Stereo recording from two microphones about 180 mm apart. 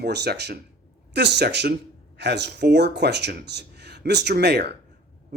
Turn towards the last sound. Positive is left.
turn(degrees=-65)  # may be behind; listen again after turning